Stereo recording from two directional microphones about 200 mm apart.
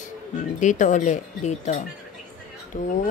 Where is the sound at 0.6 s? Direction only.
40° left (ahead or behind).